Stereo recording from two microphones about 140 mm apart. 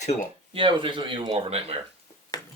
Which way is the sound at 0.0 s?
55° left (ahead or behind).